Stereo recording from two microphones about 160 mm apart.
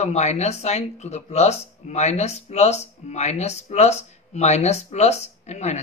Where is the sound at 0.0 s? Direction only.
45° left (ahead or behind).